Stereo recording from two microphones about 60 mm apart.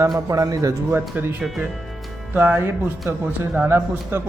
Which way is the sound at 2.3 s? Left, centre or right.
Right.